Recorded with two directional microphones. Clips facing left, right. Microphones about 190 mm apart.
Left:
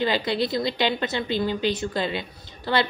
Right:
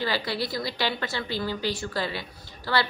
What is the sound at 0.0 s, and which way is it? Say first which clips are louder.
A woman's voice: left 5 dB; 20° left (ahead or behind).